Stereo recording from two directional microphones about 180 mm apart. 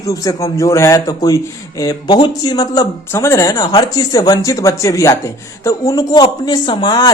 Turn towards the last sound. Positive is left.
turn(degrees=25)  # may be behind; listen again after turning